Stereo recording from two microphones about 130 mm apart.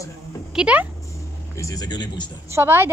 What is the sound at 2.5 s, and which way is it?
Speech, 15° right (ahead or behind).